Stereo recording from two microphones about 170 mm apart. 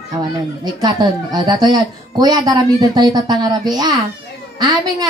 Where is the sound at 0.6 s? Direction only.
25° right (ahead or behind).